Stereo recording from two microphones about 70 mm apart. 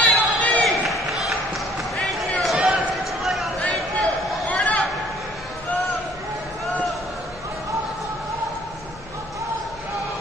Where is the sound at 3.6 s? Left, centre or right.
Centre.